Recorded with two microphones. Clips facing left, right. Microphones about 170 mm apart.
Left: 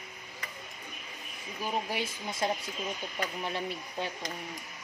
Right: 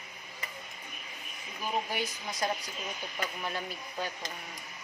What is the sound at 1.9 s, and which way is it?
Speech, 25° left (ahead or behind).